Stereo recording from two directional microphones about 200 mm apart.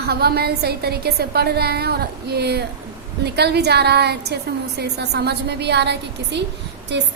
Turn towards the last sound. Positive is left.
turn(degrees=-60)  # may be behind; listen again after turning